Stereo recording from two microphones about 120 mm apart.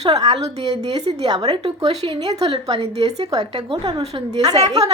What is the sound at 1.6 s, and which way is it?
Speech, 60° right (ahead or behind).